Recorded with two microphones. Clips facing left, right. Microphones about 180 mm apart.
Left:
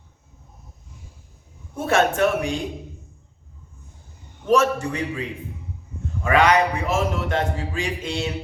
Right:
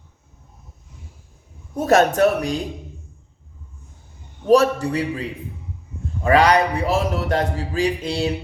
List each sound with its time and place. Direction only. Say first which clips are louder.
1.7 s a man's voice: right 4 dB; 40° right (ahead or behind)
4.4 s a man's voice: right 4 dB; 35° right (ahead or behind)
6.2 s a man's voice: right 2 dB; 35° right (ahead or behind)